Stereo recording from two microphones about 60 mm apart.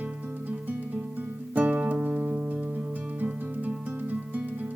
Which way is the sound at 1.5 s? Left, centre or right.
Right.